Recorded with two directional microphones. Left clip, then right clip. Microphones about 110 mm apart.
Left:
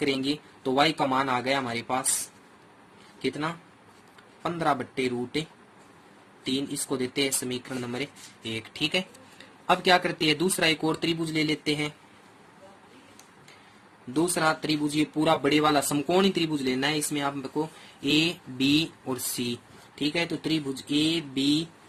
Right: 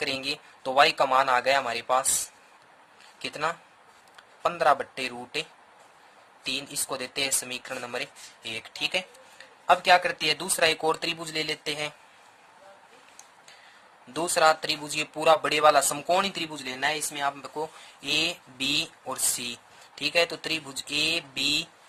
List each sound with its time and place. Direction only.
0.1 s a man's voice: 65° right (ahead or behind)
3.2 s a man's voice: 70° right (ahead or behind)
6.4 s a man's voice: 65° right (ahead or behind)
8.5 s speech: 40° right (ahead or behind)
14.1 s speech: 80° right; by 19.5 s 45° right (ahead or behind)
20.0 s a man's voice: 65° right (ahead or behind)